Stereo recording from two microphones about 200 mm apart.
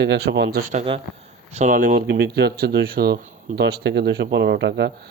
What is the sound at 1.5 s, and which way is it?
Speech, 40° right (ahead or behind).